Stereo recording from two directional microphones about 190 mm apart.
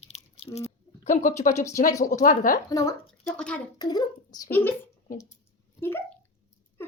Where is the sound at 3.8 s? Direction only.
20° left (ahead or behind).